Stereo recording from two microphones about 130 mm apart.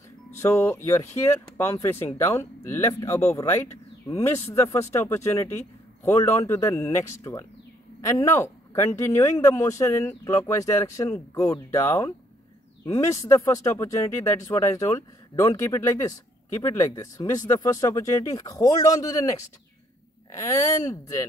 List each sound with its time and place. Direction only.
0.3 s speech: 20° left (ahead or behind)
20.3 s speech: 25° left (ahead or behind)